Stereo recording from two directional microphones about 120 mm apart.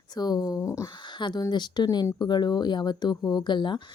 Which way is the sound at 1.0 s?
40° left (ahead or behind).